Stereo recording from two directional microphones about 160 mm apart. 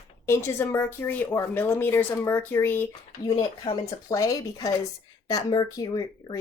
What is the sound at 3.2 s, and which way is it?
A woman's voice, 25° left (ahead or behind).